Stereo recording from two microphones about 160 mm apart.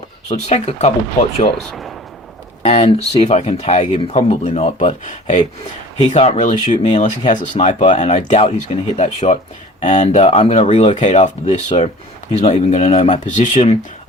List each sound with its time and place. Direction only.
0.3 s speech: 45° left (ahead or behind)
1.6 s speech: centre (ahead or behind)
2.6 s speech: 45° left (ahead or behind)